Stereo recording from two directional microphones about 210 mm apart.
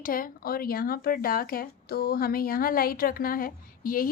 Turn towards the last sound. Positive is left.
turn(degrees=45)  # may be behind; listen again after turning